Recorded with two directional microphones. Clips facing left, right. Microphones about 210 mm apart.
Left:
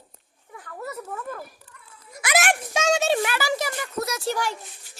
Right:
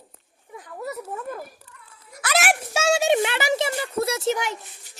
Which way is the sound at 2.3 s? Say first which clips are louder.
Even; 5° right (ahead or behind).